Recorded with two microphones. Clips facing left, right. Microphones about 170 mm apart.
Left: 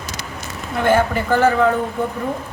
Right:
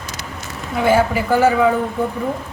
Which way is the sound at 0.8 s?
10° right (ahead or behind).